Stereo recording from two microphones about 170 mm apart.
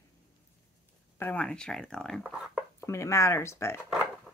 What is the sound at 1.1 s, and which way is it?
Speech, 10° left (ahead or behind).